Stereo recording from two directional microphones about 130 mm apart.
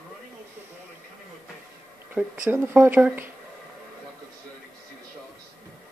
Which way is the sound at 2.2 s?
15° right (ahead or behind).